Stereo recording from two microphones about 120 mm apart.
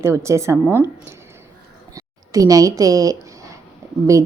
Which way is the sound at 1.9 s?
30° right (ahead or behind).